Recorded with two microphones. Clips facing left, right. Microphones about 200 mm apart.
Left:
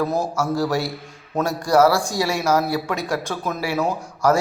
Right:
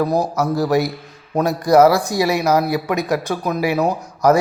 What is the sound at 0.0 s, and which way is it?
Speech, 15° right (ahead or behind).